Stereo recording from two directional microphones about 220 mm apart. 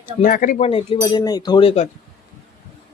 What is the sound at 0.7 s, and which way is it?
Speech, 25° left (ahead or behind).